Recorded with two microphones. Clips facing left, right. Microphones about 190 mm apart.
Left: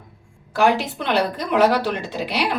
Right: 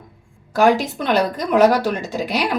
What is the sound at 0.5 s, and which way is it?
Speech, 45° right (ahead or behind).